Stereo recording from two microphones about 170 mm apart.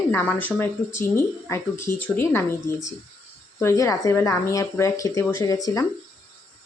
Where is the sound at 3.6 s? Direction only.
20° left (ahead or behind).